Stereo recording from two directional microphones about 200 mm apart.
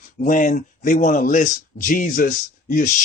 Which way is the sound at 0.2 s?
40° left (ahead or behind).